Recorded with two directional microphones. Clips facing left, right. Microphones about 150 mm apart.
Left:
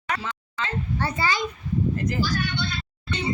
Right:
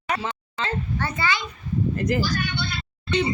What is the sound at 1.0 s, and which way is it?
Speech, 35° left (ahead or behind).